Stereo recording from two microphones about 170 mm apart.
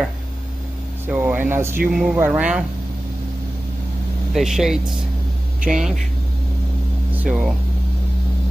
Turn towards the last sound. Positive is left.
turn(degrees=-5)  # may be behind; listen again after turning